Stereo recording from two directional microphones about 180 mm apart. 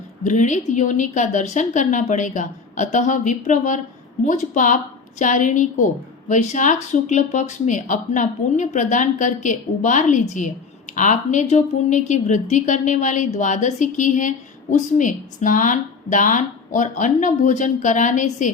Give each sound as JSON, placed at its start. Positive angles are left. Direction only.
{"t": 0.3, "sound": "a woman's voice", "side_deg": 40}